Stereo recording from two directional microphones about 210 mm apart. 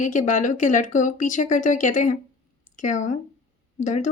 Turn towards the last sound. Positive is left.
turn(degrees=35)  # may be behind; listen again after turning